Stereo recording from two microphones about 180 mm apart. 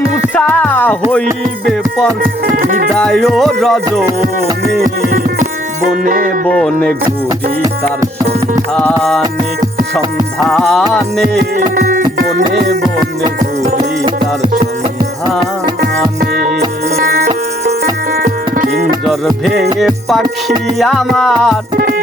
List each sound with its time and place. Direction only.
0.0 s music: 10° left (ahead or behind)
2.5 s speech: 45° right (ahead or behind)
3.0 s music: centre (ahead or behind)
4.8 s music: 55° right (ahead or behind)
6.1 s speech: 50° right (ahead or behind)
6.5 s music: 5° left (ahead or behind)
8.7 s music: 5° left (ahead or behind)
10.4 s music: centre (ahead or behind)
11.5 s music: 45° right (ahead or behind)
13.7 s music: 55° right (ahead or behind)
16.2 s music: 55° right (ahead or behind)
19.8 s music: centre (ahead or behind)
21.8 s music: 50° right (ahead or behind)